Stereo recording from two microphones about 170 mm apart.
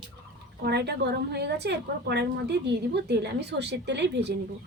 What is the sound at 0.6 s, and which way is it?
A woman's voice, 75° right (ahead or behind).